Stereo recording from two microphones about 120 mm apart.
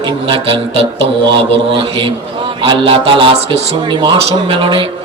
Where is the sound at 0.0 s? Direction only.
45° right (ahead or behind).